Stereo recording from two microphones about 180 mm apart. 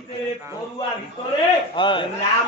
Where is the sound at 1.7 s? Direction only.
25° left (ahead or behind).